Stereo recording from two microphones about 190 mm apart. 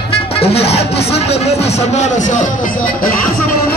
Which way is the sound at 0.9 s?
30° left (ahead or behind).